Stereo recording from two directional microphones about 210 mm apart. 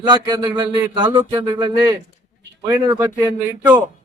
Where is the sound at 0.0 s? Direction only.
20° right (ahead or behind).